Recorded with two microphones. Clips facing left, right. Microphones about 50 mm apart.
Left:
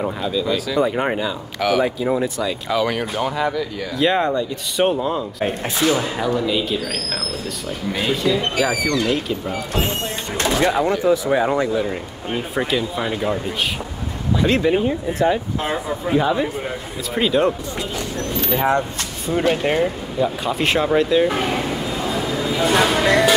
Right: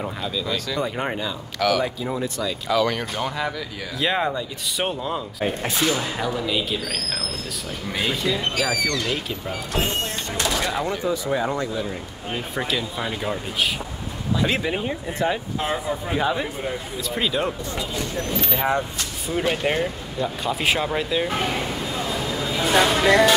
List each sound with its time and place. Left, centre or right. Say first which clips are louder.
0.0 s speech: left 6 dB; centre
8.6 s speech: left 4 dB; centre
9.1 s speech: left 5 dB; centre
10.3 s a sound: left 6 dB; left
10.7 s speech: left 7 dB; centre
11.2 s speech: left 6 dB; left
12.5 s speech: left 5 dB; centre
14.4 s speech: left 7 dB; centre
22.1 s a sound: left 4 dB; centre